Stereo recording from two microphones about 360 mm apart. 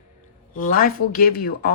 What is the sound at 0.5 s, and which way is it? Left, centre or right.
Speech, left.